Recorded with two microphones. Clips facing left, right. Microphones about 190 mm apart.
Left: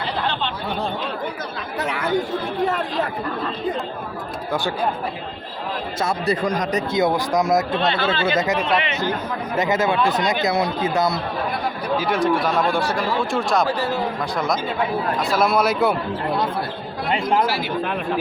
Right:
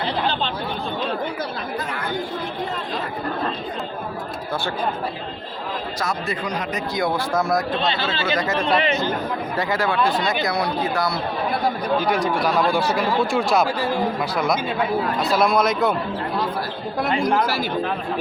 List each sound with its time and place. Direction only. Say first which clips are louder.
1.8 s chatter: left 3 dB; 75° left (ahead or behind)
6.0 s speech: left 5 dB; 30° left (ahead or behind)
6.4 s speech: left 5 dB; 45° left (ahead or behind)
6.9 s speech: left 2 dB; 20° left (ahead or behind)
7.8 s speech: left 2 dB; 55° left (ahead or behind)
8.6 s speech: right 1 dB; 35° right (ahead or behind)
9.6 s speech: left 3 dB; 20° left (ahead or behind)
11.9 s speech: left 5 dB; centre (ahead or behind)
15.3 s speech: even; 5° left (ahead or behind)